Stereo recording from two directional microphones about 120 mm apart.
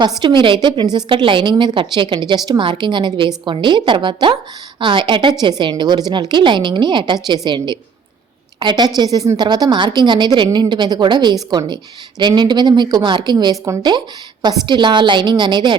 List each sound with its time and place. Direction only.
0.0 s a woman's voice: 40° right (ahead or behind)